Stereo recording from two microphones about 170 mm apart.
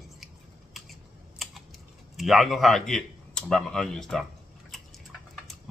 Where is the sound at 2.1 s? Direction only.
Centre (ahead or behind).